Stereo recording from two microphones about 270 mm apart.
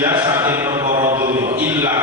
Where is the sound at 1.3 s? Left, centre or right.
Right.